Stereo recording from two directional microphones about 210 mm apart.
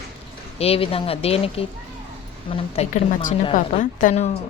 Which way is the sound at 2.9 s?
40° left (ahead or behind).